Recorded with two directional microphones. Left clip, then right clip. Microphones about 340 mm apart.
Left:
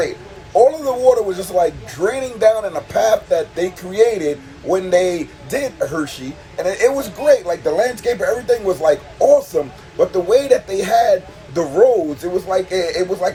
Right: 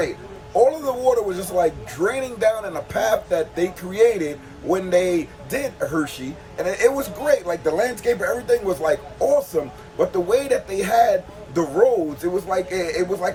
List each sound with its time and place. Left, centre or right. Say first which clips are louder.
0.5 s speech: left 5 dB; centre